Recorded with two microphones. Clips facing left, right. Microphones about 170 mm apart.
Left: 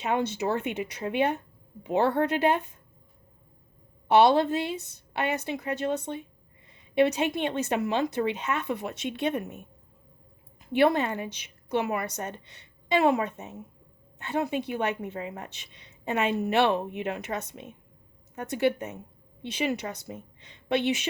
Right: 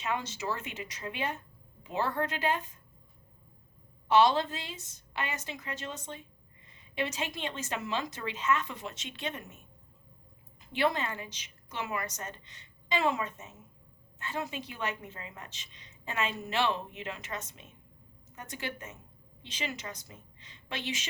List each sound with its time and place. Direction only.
0.0 s a woman's voice: 60° left (ahead or behind)
4.1 s a woman's voice: 60° left (ahead or behind)
10.7 s a woman's voice: 60° left (ahead or behind)